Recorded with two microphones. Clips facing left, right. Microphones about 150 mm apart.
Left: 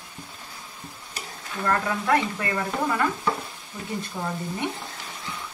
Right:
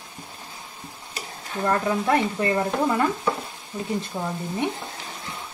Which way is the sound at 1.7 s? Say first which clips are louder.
Right 1 dB; 20° right (ahead or behind).